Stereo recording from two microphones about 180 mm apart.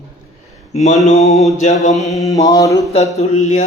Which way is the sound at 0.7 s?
40° left (ahead or behind).